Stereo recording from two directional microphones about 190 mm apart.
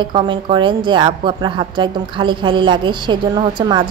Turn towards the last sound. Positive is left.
turn(degrees=-25)  # may be behind; listen again after turning